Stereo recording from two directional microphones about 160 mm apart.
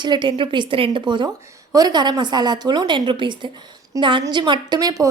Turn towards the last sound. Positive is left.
turn(degrees=-25)  # may be behind; listen again after turning